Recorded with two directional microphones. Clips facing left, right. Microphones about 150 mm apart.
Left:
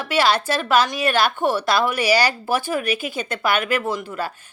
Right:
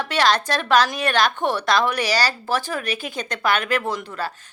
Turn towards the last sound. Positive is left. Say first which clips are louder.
# left 1 dB
turn(degrees=10)  # may be behind; listen again after turning